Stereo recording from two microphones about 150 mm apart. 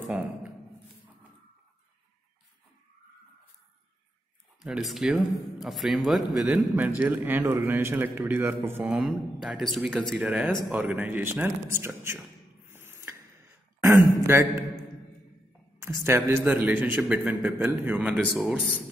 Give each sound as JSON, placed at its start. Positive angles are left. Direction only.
{"t": 0.0, "sound": "a sound", "side_deg": -10}
{"t": 4.6, "sound": "a man's voice", "side_deg": -5}
{"t": 8.9, "sound": "a man's voice", "side_deg": 0}
{"t": 12.6, "sound": "rodents", "side_deg": -15}
{"t": 13.7, "sound": "a sound", "side_deg": -20}
{"t": 14.2, "sound": "a man's voice", "side_deg": -15}
{"t": 15.8, "sound": "a man's voice", "side_deg": -20}